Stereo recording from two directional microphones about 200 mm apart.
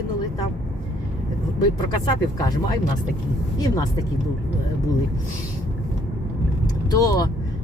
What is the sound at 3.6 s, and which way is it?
Speech, 15° left (ahead or behind).